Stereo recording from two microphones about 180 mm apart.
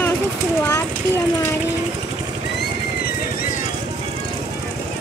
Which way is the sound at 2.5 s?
60° left (ahead or behind).